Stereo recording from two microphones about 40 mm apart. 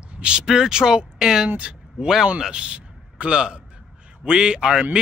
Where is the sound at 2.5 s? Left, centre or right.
Right.